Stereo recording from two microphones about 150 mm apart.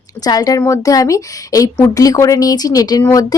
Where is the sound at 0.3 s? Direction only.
25° left (ahead or behind).